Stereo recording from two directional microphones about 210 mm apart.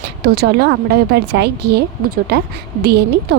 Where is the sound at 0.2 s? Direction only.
50° right (ahead or behind).